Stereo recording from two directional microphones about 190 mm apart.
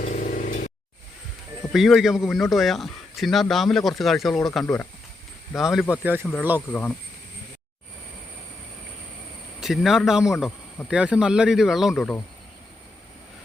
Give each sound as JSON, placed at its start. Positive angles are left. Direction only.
{"t": 0.0, "sound": "vehicle", "side_deg": 45}
{"t": 1.7, "sound": "a man's voice", "side_deg": 0}
{"t": 6.7, "sound": "speech", "side_deg": 10}
{"t": 9.6, "sound": "a man's voice", "side_deg": 0}